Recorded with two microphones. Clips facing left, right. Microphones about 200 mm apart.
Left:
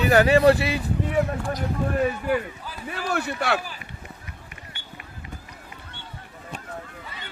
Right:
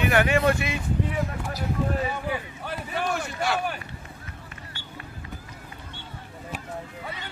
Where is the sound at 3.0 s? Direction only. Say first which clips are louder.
Left 4 dB; 65° left (ahead or behind).